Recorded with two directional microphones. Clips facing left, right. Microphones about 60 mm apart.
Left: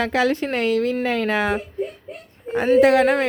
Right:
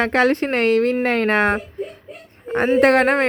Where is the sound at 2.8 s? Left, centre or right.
Right.